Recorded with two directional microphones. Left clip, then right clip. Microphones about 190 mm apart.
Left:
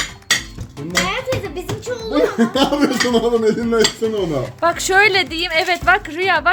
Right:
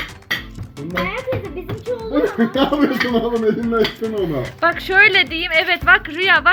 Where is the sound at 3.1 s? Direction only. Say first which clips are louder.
Left 2 dB; 10° left (ahead or behind).